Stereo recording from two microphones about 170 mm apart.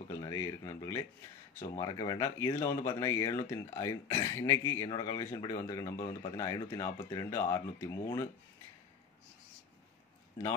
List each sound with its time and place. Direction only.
0.1 s speech: 20° left (ahead or behind)